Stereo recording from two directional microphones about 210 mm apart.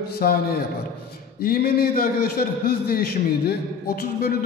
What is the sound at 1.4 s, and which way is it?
A man's voice, 45° left (ahead or behind).